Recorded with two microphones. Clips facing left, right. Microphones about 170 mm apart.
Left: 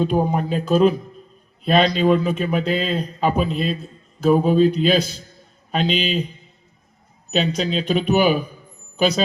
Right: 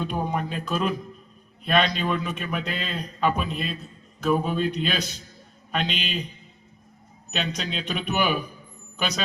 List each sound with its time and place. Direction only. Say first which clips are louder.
0.0 s a man's voice: left 8 dB; 35° left (ahead or behind)
7.3 s a man's voice: left 9 dB; 35° left (ahead or behind)